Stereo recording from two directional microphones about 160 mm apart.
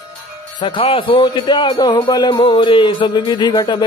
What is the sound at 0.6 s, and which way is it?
A man's voice, 30° left (ahead or behind).